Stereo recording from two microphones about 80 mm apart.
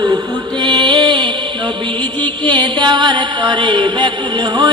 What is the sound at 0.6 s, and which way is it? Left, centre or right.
Music, right.